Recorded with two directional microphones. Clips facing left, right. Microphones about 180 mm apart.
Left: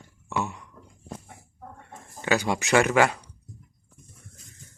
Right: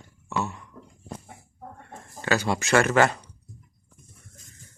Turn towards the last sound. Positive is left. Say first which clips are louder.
# even
turn(degrees=10)  # may be behind; listen again after turning